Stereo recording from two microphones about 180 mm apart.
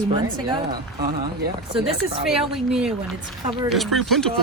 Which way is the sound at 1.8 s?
Centre (ahead or behind).